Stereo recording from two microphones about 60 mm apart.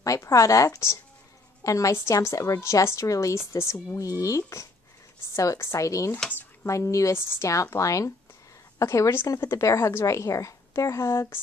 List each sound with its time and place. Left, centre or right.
0.0 s speech: left
7.2 s a woman's voice: left